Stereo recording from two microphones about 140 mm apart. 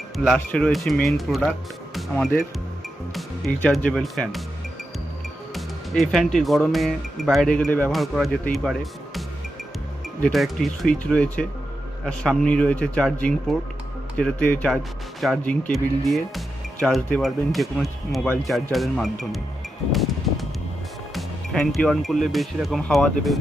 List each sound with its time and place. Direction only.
0.2 s speech: 5° left (ahead or behind)
3.2 s speech: centre (ahead or behind)
5.5 s speech: centre (ahead or behind)
10.2 s speech: centre (ahead or behind)
19.9 s a sound: centre (ahead or behind)
21.2 s speech: centre (ahead or behind)